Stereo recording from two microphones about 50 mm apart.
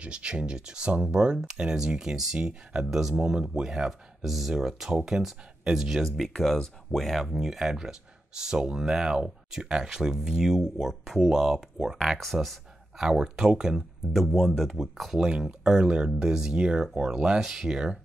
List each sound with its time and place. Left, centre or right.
0.0 s speech: right
6.0 s speech: centre
14.1 s speech: centre